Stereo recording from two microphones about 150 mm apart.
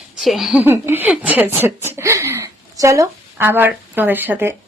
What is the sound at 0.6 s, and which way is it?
A woman's voice, 15° right (ahead or behind).